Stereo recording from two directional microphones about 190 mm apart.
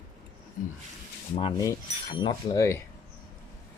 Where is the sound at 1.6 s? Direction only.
20° left (ahead or behind).